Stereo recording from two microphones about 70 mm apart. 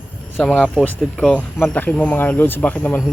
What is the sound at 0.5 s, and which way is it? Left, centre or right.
Speech, centre.